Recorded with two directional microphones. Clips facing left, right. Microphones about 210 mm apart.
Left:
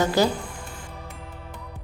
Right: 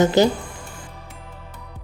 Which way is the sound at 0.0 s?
25° right (ahead or behind).